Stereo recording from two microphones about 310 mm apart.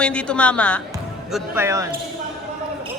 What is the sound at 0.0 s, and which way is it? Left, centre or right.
Speech, centre.